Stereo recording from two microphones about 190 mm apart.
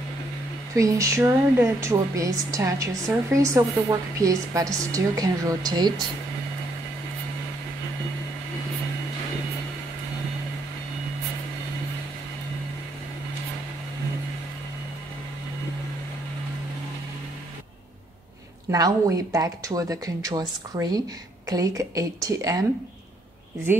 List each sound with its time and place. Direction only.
0.7 s a woman's voice: 15° right (ahead or behind)
18.7 s a woman's voice: 20° right (ahead or behind)